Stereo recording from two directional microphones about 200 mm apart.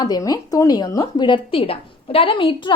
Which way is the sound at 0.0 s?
20° left (ahead or behind).